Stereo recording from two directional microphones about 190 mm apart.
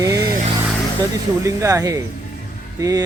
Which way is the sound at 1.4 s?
15° right (ahead or behind).